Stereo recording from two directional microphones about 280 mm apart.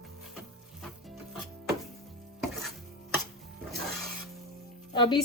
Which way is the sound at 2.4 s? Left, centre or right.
Centre.